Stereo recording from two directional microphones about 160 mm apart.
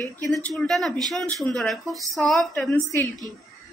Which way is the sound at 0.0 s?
Centre (ahead or behind).